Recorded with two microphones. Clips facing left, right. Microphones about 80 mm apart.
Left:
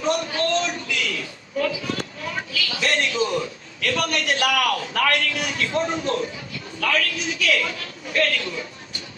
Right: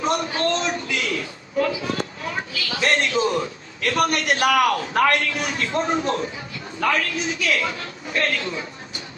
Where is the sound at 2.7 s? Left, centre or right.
Right.